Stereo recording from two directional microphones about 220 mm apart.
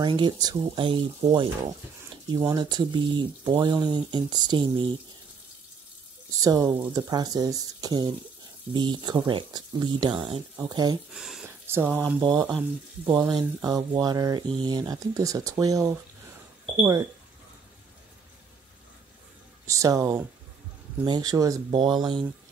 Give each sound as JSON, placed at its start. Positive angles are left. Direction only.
{"t": 0.0, "sound": "speech", "side_deg": -20}
{"t": 6.4, "sound": "speech", "side_deg": -15}
{"t": 11.1, "sound": "a sound", "side_deg": 0}
{"t": 12.2, "sound": "speech", "side_deg": -15}
{"t": 19.6, "sound": "speech", "side_deg": -15}